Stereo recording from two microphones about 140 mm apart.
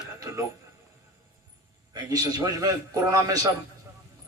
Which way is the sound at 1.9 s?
25° right (ahead or behind).